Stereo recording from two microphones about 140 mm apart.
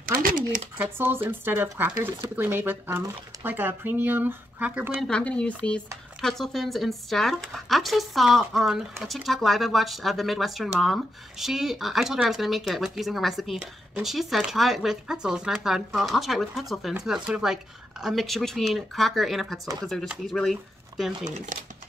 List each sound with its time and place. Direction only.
0.0 s a sound: 90° right
0.7 s speech: 15° right (ahead or behind)
5.0 s speech: 5° left (ahead or behind)